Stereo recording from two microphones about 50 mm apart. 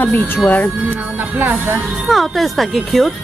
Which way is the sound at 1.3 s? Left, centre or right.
Right.